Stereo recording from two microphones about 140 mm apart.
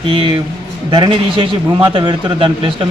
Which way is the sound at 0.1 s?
40° right (ahead or behind).